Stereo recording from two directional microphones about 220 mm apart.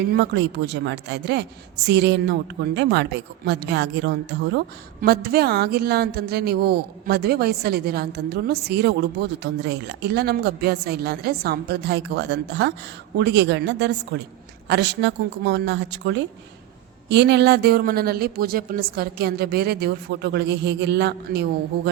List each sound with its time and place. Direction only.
0.1 s a woman's voice: 50° right (ahead or behind)